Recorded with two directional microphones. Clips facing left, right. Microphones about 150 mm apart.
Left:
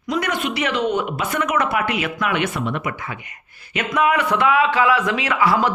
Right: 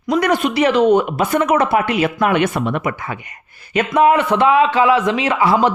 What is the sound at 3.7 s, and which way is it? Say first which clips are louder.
A man's voice: right 6 dB; 35° right (ahead or behind).